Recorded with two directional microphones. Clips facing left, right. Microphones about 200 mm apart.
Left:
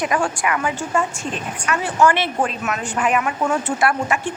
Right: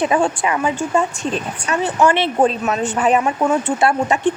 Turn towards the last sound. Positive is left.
turn(degrees=-30)  # may be behind; listen again after turning